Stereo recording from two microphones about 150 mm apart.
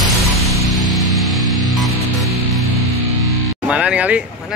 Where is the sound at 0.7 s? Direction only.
Centre (ahead or behind).